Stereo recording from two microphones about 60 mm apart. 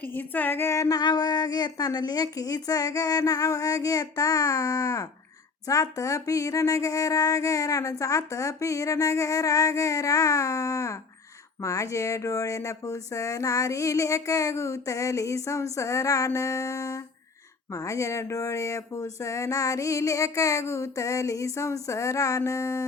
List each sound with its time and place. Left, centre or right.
0.1 s female singing: left
0.6 s speech: left
0.9 s a woman's voice: left